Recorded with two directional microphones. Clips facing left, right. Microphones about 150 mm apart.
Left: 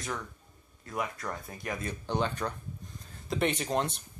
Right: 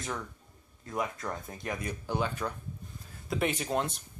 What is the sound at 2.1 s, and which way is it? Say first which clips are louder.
Speech: left 1 dB; 5° right (ahead or behind).